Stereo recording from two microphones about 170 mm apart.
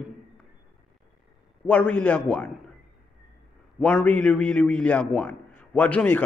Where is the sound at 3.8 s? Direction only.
5° left (ahead or behind).